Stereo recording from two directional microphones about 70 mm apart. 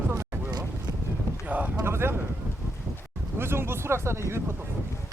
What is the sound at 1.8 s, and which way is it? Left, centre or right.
Speech, right.